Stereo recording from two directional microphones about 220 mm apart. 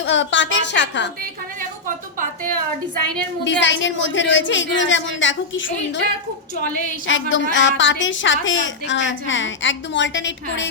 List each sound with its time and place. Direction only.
0.0 s a woman's voice: 55° left (ahead or behind)
3.4 s a woman's voice: 55° left (ahead or behind)
7.1 s a woman's voice: 55° left (ahead or behind)